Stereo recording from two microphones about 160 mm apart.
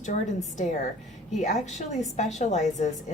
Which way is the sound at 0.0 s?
50° left (ahead or behind).